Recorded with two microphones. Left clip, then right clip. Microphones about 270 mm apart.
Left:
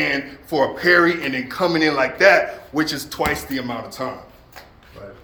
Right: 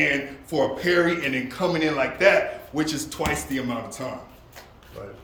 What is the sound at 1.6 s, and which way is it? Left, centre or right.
Speech, centre.